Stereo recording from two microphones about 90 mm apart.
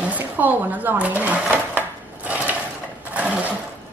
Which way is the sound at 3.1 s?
15° right (ahead or behind).